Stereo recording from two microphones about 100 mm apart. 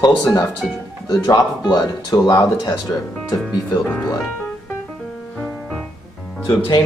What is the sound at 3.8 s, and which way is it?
Speech, 20° left (ahead or behind).